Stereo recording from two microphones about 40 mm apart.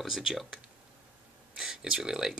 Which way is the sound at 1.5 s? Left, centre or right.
Centre.